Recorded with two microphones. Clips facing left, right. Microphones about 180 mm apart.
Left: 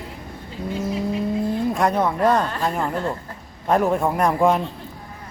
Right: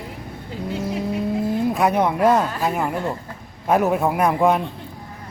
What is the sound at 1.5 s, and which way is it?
A man's voice, 5° right (ahead or behind).